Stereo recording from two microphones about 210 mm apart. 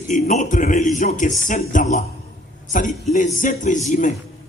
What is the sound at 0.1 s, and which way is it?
A man's voice, 35° left (ahead or behind).